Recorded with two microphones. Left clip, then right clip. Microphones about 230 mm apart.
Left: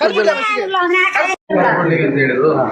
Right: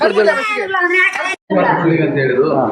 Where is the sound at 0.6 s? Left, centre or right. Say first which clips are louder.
Right 1 dB; left.